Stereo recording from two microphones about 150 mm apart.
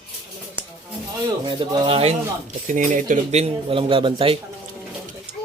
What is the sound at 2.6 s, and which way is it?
Speech, 60° right (ahead or behind).